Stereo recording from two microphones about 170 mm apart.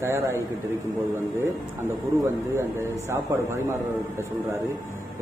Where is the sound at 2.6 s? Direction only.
15° right (ahead or behind).